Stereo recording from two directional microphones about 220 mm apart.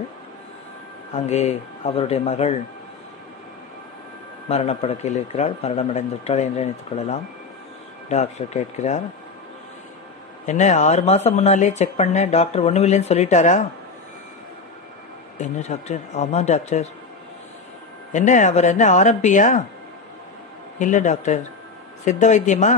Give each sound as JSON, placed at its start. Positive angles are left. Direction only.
{"t": 1.1, "sound": "speech", "side_deg": 30}
{"t": 4.5, "sound": "speech", "side_deg": 30}
{"t": 10.4, "sound": "speech", "side_deg": 30}
{"t": 15.3, "sound": "speech", "side_deg": 35}
{"t": 18.1, "sound": "speech", "side_deg": 35}
{"t": 20.8, "sound": "speech", "side_deg": 35}